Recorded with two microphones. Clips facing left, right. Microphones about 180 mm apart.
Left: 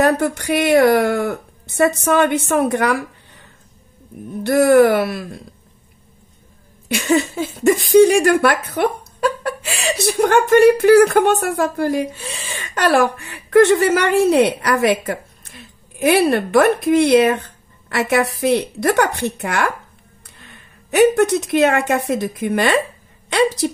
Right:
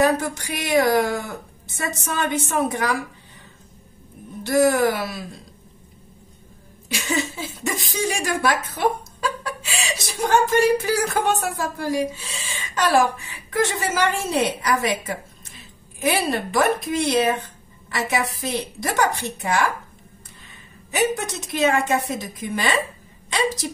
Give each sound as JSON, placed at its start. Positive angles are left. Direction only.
{"t": 0.0, "sound": "speech", "side_deg": 60}
{"t": 4.4, "sound": "speech", "side_deg": 60}
{"t": 6.9, "sound": "a woman's voice", "side_deg": 60}